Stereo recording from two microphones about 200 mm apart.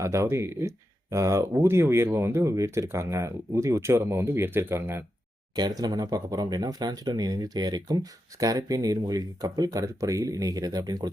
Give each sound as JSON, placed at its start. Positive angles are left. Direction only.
{"t": 0.0, "sound": "speech", "side_deg": -15}